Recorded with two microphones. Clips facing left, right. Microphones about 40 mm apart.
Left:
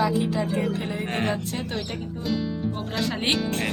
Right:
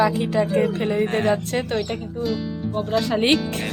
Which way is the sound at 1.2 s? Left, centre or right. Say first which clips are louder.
Right 6 dB; right.